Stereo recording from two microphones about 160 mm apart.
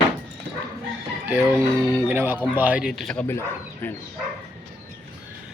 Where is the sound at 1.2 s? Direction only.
20° right (ahead or behind); by 3.2 s centre (ahead or behind).